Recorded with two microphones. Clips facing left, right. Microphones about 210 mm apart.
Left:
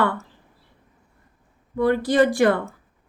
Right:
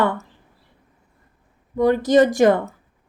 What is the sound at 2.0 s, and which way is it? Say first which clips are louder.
Speech: right 5 dB; 45° right (ahead or behind).